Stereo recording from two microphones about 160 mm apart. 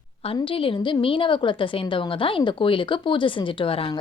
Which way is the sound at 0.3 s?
35° left (ahead or behind).